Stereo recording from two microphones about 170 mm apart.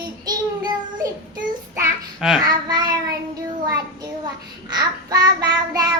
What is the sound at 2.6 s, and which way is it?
Child singing, 25° right (ahead or behind).